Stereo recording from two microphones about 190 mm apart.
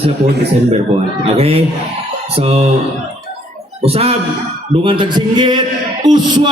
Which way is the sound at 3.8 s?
30° right (ahead or behind).